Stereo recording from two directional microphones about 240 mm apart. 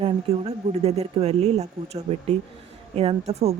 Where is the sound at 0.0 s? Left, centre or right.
Right.